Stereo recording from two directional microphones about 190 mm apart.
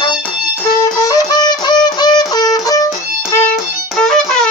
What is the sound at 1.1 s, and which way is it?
Wind instrument, 20° left (ahead or behind).